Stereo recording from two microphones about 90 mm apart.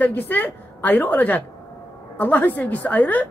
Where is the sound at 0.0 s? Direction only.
20° left (ahead or behind).